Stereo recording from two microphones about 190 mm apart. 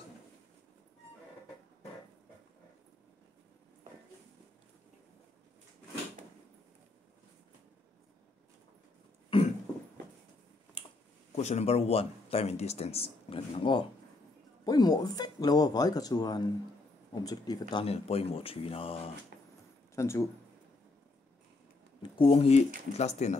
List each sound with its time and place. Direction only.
9.3 s cough: 25° left (ahead or behind)
11.3 s speech: 35° left (ahead or behind)
20.0 s speech: 15° left (ahead or behind)
22.2 s speech: 30° left (ahead or behind)